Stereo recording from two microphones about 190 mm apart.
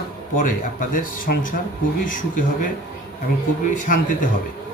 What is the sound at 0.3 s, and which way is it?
A man's voice, 45° left (ahead or behind).